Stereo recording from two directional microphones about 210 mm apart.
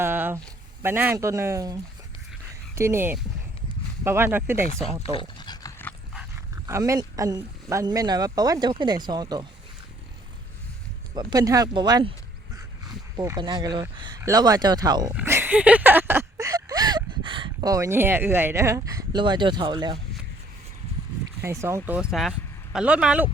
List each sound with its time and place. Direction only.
0.0 s a sound: 10° right (ahead or behind)
0.8 s speech: 10° right (ahead or behind)
5.4 s dog: 20° left (ahead or behind)
6.1 s speech: 10° right (ahead or behind)
11.1 s speech: 20° right (ahead or behind)
13.1 s speech: 20° right (ahead or behind)
15.1 s a sound: 10° right (ahead or behind)
21.4 s speech: 15° right (ahead or behind)